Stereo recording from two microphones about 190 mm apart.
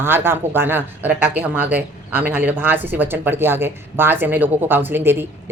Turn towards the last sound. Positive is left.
turn(degrees=-10)  # may be behind; listen again after turning